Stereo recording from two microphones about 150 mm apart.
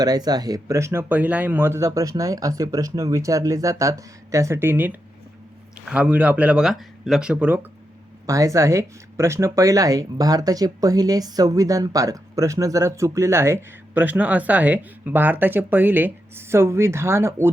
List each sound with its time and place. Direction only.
0.0 s speech: 25° right (ahead or behind); by 7.6 s 10° right (ahead or behind)
8.3 s speech: 20° right (ahead or behind)